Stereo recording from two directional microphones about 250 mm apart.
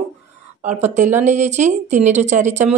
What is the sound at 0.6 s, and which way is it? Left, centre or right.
Speech, right.